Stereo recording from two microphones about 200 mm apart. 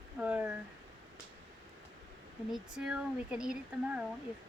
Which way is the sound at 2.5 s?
5° right (ahead or behind).